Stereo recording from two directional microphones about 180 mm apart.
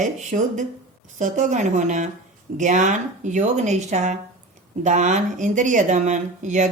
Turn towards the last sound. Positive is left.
turn(degrees=-40)  # may be behind; listen again after turning